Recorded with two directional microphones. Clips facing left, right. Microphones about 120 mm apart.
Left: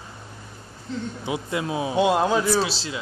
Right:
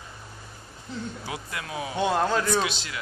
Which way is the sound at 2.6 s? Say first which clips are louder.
Left 3 dB; 30° left (ahead or behind).